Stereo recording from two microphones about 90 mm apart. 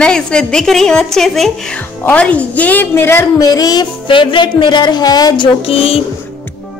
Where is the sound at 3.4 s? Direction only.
45° left (ahead or behind).